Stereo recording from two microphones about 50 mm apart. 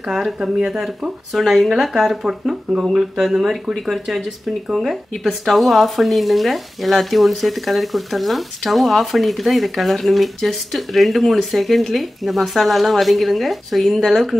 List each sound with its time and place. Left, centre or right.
0.4 s speech: centre
0.7 s speech: centre